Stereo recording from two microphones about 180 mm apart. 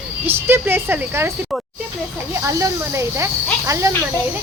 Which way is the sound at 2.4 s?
15° right (ahead or behind).